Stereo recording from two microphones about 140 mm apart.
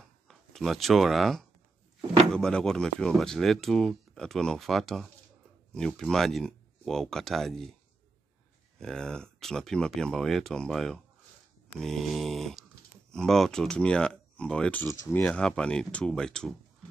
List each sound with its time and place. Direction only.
0.3 s speech: centre (ahead or behind)
8.7 s speech: 5° left (ahead or behind)